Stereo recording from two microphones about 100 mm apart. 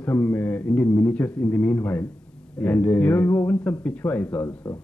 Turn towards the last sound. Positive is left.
turn(degrees=25)  # may be behind; listen again after turning